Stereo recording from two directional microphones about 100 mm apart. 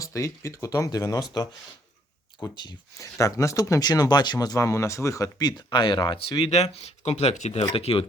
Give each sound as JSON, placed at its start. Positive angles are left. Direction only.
{"t": 0.0, "sound": "speech", "side_deg": 30}
{"t": 3.0, "sound": "speech", "side_deg": 30}
{"t": 7.7, "sound": "speech", "side_deg": 70}